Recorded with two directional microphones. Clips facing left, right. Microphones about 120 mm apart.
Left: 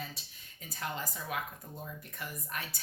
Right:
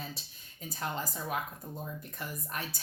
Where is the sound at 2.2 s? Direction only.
35° right (ahead or behind).